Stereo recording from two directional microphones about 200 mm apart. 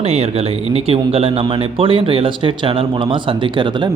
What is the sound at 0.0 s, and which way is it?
A man's voice, 30° right (ahead or behind).